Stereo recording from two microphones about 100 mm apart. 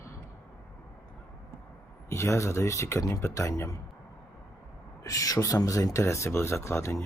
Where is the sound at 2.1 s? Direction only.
30° left (ahead or behind).